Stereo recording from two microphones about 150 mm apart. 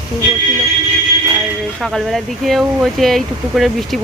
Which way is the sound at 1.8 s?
Centre (ahead or behind).